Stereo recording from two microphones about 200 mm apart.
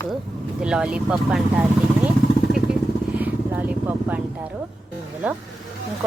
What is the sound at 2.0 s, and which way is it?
Vehicle, 5° right (ahead or behind).